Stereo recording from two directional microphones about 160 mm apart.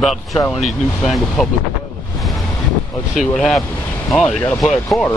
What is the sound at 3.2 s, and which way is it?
Speech, centre (ahead or behind).